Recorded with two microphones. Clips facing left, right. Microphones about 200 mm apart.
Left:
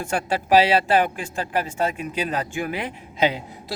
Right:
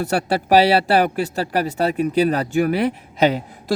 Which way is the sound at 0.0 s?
40° right (ahead or behind).